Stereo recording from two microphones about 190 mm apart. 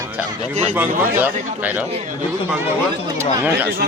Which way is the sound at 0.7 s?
10° right (ahead or behind).